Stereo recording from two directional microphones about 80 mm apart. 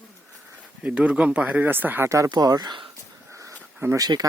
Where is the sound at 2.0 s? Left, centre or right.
Right.